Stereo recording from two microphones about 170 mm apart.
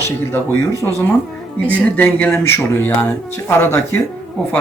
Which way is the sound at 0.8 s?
15° left (ahead or behind).